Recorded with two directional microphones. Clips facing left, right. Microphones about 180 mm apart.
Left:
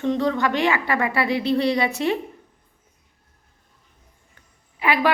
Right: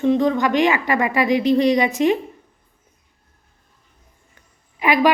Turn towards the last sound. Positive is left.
turn(degrees=-15)  # may be behind; listen again after turning